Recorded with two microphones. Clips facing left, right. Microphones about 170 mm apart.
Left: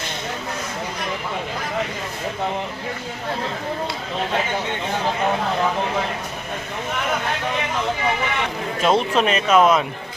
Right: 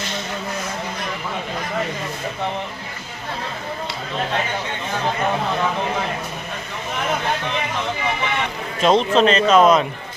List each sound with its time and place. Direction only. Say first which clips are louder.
8.8 s speech: right 3 dB; 5° left (ahead or behind)